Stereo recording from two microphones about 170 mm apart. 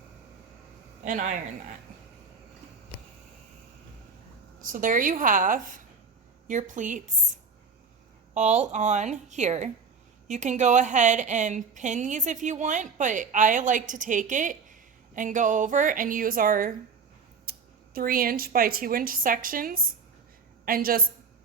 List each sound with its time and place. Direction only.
4.6 s a woman's voice: 50° right (ahead or behind)
8.3 s a woman's voice: 45° right (ahead or behind)
17.5 s a sound: 60° right (ahead or behind)
17.9 s a woman's voice: 55° right (ahead or behind)